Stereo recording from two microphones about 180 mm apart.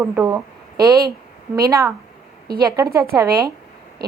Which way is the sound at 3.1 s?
15° right (ahead or behind).